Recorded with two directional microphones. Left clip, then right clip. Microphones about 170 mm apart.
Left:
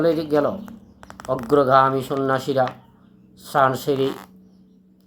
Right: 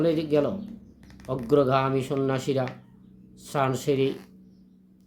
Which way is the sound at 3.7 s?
10° right (ahead or behind).